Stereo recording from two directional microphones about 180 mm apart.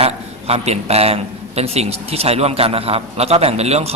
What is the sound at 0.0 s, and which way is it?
A man's voice, 35° right (ahead or behind).